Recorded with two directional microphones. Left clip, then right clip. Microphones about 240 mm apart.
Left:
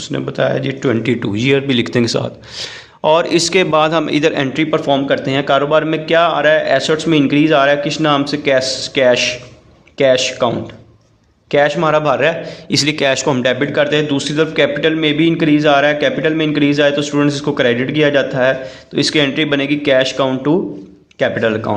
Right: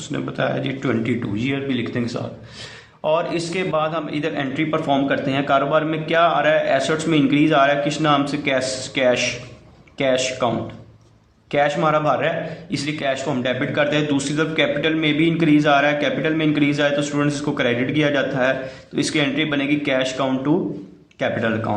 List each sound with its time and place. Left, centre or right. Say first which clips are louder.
0.0 s speech: left 7 dB; left
11.5 s speech: left 5 dB; left